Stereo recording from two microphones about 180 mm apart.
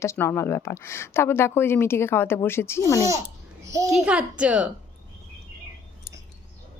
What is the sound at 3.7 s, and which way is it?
Speech, 15° right (ahead or behind).